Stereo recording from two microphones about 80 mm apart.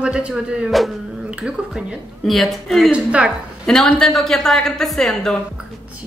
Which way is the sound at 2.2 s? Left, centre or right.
Centre.